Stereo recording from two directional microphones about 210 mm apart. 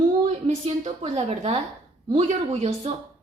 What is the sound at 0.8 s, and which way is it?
A woman's voice, 30° right (ahead or behind).